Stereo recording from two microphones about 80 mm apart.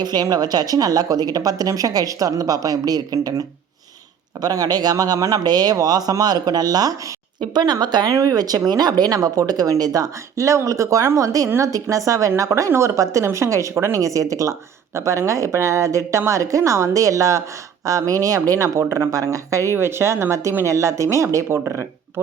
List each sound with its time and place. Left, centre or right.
0.0 s a woman's voice: right
8.1 s a woman's voice: right